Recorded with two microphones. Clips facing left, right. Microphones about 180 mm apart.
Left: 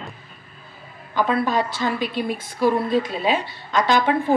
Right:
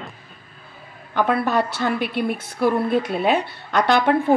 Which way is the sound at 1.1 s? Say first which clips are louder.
Right 1 dB; 60° right (ahead or behind).